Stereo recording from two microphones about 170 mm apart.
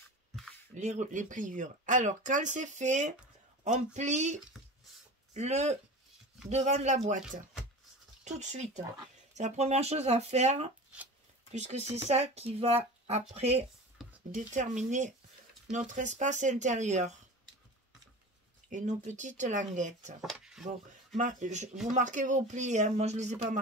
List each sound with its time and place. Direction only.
0.7 s speech: 45° right (ahead or behind)
8.2 s speech: 45° right (ahead or behind)
18.7 s speech: 45° right (ahead or behind)
20.2 s speech: 5° right (ahead or behind)
21.2 s speech: 45° right (ahead or behind)